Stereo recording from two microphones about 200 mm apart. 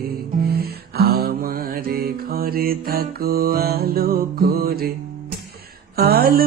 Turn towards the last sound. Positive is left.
turn(degrees=-50)  # may be behind; listen again after turning